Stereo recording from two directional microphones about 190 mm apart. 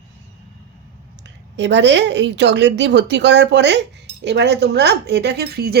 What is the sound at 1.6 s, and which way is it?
A woman's voice, 65° right (ahead or behind).